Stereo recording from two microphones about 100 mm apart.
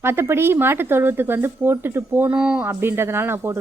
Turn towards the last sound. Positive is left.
turn(degrees=-25)  # may be behind; listen again after turning